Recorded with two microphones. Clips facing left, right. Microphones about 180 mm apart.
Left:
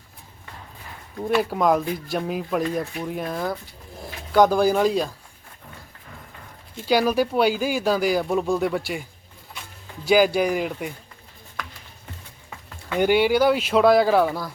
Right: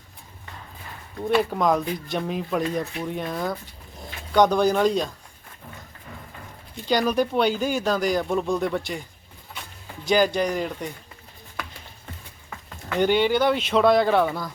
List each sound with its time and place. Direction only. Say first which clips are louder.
1.3 s speech: left 1 dB; 5° left (ahead or behind)
6.7 s speech: left 2 dB; 5° left (ahead or behind)
10.1 s speech: left 3 dB; 5° left (ahead or behind)
12.9 s speech: left 2 dB; 10° left (ahead or behind)